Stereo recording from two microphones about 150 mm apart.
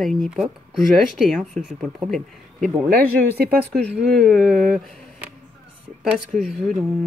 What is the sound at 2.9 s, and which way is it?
Speech, 85° right.